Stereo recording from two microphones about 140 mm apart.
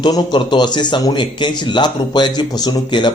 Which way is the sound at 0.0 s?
30° left (ahead or behind).